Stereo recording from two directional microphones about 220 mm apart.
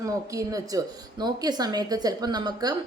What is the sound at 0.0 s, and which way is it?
A woman's voice, 15° right (ahead or behind).